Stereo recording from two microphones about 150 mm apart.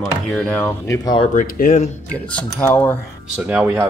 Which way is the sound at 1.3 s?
65° left (ahead or behind).